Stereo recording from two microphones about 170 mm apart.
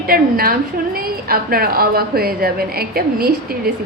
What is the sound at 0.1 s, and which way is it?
A woman's voice, 60° right (ahead or behind).